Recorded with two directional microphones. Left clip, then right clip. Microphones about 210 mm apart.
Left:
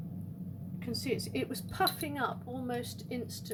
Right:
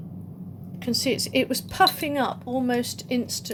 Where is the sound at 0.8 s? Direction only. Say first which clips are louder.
Right 11 dB; 40° right (ahead or behind).